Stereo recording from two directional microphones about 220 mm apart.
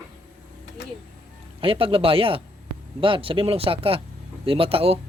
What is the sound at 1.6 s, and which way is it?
Speech, 25° right (ahead or behind).